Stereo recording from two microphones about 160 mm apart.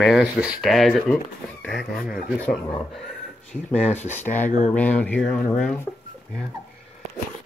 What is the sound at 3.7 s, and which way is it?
Speech, 45° left (ahead or behind).